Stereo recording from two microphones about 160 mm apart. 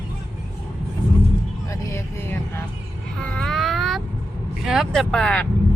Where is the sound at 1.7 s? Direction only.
15° left (ahead or behind).